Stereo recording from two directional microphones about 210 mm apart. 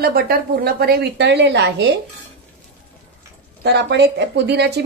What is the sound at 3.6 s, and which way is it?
Speech, 50° right (ahead or behind).